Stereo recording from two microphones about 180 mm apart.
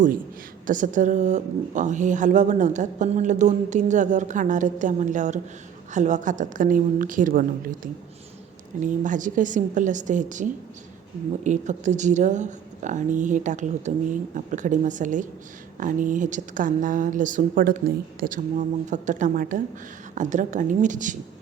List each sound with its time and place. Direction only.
0.7 s a woman's voice: 45° right (ahead or behind)
8.8 s a woman's voice: 45° right (ahead or behind)